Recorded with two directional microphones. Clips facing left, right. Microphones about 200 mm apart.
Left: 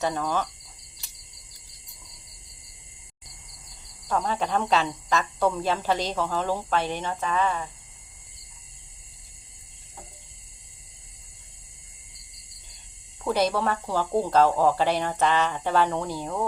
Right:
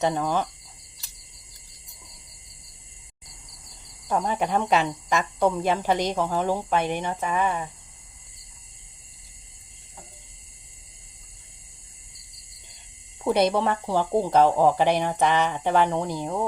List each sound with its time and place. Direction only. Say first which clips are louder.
0.0 s speech: right 3 dB; 15° right (ahead or behind)
4.1 s speech: right 2 dB; 15° right (ahead or behind)
13.2 s speech: right 3 dB; 20° right (ahead or behind)